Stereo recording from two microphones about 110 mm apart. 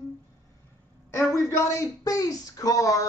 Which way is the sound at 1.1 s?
25° left (ahead or behind).